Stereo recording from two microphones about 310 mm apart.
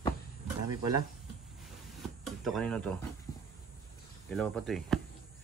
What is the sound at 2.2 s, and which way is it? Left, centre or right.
Speech, centre.